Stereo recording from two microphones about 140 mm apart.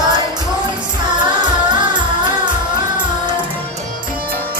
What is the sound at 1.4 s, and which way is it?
Music, 35° right (ahead or behind).